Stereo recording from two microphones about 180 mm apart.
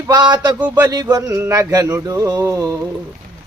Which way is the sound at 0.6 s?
10° right (ahead or behind).